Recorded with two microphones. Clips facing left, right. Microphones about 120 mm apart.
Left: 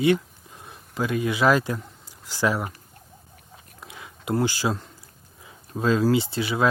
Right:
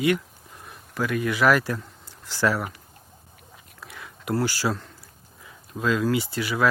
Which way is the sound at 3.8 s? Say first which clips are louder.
Even; 20° left (ahead or behind).